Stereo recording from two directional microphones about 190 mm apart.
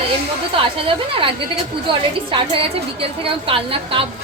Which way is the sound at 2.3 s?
30° right (ahead or behind).